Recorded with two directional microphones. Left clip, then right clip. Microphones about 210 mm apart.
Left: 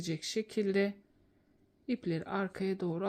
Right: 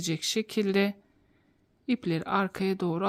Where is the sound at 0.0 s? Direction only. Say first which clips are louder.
Right 6 dB; 30° right (ahead or behind).